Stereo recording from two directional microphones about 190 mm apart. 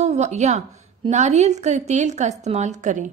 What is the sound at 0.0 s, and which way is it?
A woman's voice, 35° right (ahead or behind).